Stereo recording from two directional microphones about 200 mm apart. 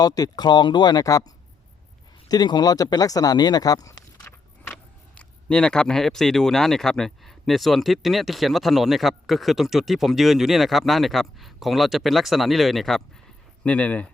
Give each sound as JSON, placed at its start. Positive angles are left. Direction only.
{"t": 0.0, "sound": "speech", "side_deg": 20}
{"t": 2.3, "sound": "speech", "side_deg": 20}
{"t": 4.6, "sound": "speech", "side_deg": 5}